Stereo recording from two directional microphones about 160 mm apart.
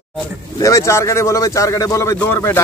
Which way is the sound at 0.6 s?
20° left (ahead or behind).